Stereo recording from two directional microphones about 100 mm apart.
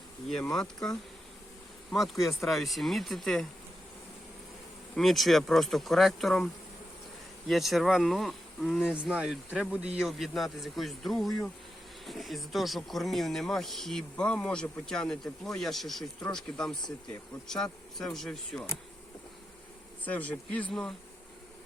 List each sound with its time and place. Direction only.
0.5 s speech: 5° left (ahead or behind)
4.9 s speech: centre (ahead or behind)
20.1 s speech: 15° left (ahead or behind)